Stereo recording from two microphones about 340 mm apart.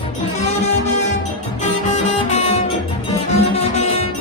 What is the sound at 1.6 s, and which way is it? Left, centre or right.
Music, centre.